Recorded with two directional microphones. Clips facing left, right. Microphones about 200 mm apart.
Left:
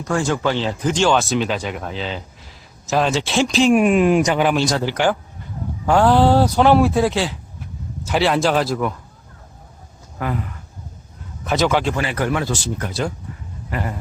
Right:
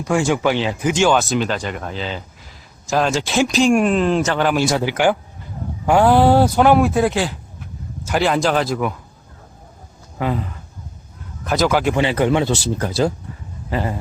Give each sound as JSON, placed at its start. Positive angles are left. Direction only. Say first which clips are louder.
{"t": 0.0, "sound": "speech", "louder": "right 2 dB", "side_deg": -10}
{"t": 4.5, "sound": "speech", "louder": "right 1 dB", "side_deg": -10}
{"t": 10.2, "sound": "speech", "louder": "right 3 dB", "side_deg": -25}
{"t": 11.4, "sound": "speech", "louder": "right 1 dB", "side_deg": -5}
{"t": 11.9, "sound": "speech", "louder": "right 5 dB", "side_deg": -20}
{"t": 12.9, "sound": "speech", "louder": "right 7 dB", "side_deg": -35}
{"t": 13.7, "sound": "a man's voice", "louder": "right 4 dB", "side_deg": -25}